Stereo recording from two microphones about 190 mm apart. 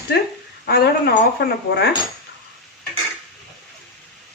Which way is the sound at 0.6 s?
55° left (ahead or behind).